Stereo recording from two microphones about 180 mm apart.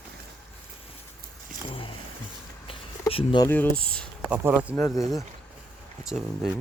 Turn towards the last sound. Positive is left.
turn(degrees=0)  # may be behind; listen again after turning